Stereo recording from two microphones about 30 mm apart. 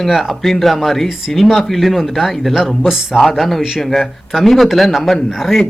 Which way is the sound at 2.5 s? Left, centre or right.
Centre.